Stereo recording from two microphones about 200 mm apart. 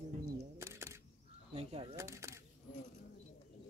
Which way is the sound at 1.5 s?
30° right (ahead or behind).